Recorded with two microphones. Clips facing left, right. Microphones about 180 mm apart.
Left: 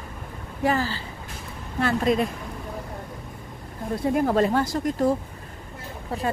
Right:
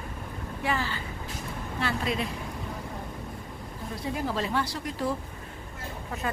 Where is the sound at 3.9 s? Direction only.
55° left (ahead or behind).